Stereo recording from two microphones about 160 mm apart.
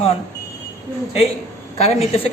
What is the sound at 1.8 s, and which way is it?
Speech, 40° left (ahead or behind).